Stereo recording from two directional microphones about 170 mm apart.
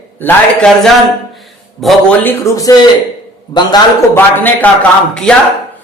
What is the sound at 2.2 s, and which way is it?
A man's voice, 15° left (ahead or behind).